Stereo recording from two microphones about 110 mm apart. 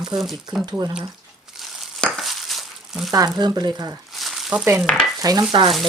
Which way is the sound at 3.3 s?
40° right (ahead or behind).